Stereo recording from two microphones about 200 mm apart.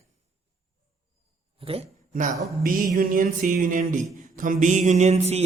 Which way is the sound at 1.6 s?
30° right (ahead or behind).